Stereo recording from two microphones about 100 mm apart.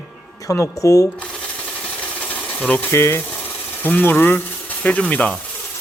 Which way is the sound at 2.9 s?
25° left (ahead or behind).